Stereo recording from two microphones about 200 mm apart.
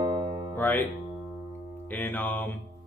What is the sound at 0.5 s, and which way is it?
A man's voice, 10° left (ahead or behind).